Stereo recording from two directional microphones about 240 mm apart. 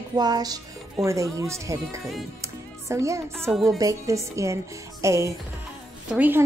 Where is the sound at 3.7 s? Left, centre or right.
Centre.